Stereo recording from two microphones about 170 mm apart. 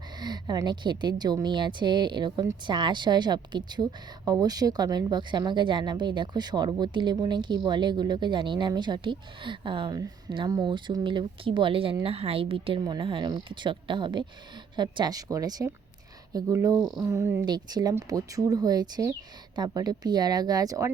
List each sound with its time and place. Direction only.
0.2 s a woman's voice: 25° right (ahead or behind)